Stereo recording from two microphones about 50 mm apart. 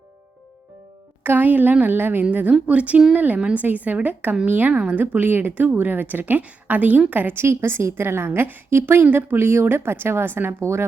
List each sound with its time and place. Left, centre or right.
1.2 s a woman's voice: right
2.3 s a woman's voice: right
4.7 s a woman's voice: right
4.9 s a woman's voice: right
7.4 s a woman's voice: right
8.0 s a woman's voice: right
10.6 s a woman's voice: right